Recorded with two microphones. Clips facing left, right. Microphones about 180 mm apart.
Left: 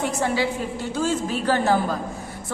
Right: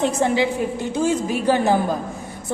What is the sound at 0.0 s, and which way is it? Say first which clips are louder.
A woman's voice: right 4 dB; 20° right (ahead or behind).